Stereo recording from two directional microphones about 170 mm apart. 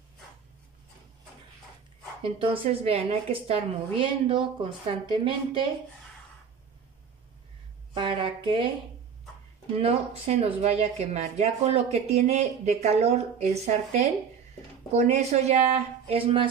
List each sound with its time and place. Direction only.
2.2 s speech: 30° right (ahead or behind)
7.9 s a sound: 30° right (ahead or behind)
9.8 s speech: 35° right (ahead or behind)
14.9 s speech: 40° right (ahead or behind)